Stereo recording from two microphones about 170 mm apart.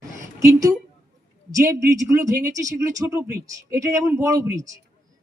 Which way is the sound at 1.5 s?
20° right (ahead or behind).